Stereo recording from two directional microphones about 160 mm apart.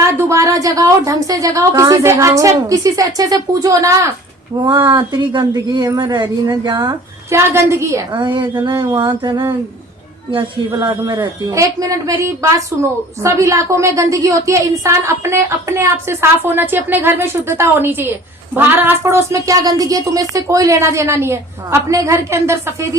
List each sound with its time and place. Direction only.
0.0 s a woman's voice: 15° right (ahead or behind)